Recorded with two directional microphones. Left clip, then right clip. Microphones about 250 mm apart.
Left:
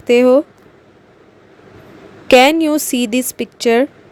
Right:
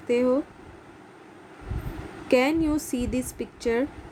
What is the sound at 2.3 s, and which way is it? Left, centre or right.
A woman's voice, left.